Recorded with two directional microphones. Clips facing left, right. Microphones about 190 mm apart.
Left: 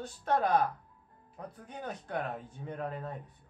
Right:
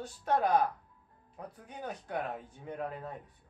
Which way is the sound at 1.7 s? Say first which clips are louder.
Even; 10° right (ahead or behind).